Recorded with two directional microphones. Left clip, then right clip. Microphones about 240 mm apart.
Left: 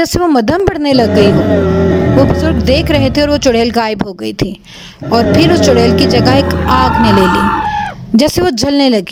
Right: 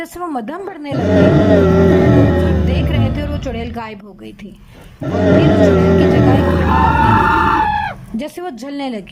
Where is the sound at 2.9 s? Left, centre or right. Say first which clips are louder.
Left 11 dB; left.